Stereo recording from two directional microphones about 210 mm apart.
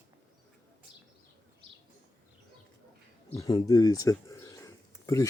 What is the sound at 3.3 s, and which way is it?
Speech, 15° left (ahead or behind).